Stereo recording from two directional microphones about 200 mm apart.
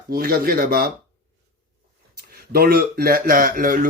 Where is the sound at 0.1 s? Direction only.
45° right (ahead or behind).